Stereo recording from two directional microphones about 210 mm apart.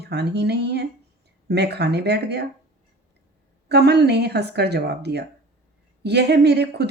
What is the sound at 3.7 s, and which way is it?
Speech, 50° right (ahead or behind).